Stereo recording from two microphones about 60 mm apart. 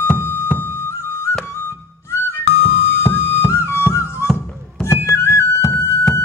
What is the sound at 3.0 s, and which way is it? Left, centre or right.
Flute, left.